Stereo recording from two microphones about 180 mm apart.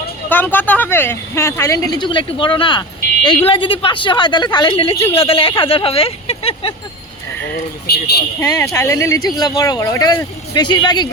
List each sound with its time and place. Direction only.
0.3 s speech: 10° left (ahead or behind); by 6.7 s 30° left (ahead or behind)
7.9 s a man's voice: 65° left (ahead or behind)
8.4 s speech: 15° left (ahead or behind)